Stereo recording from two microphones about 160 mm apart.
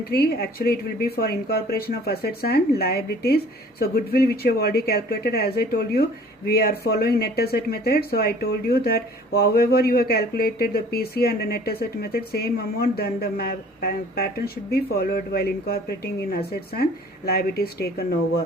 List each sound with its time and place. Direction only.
0.0 s speech: 75° left (ahead or behind)